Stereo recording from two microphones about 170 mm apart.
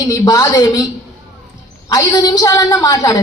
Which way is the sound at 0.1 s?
20° left (ahead or behind).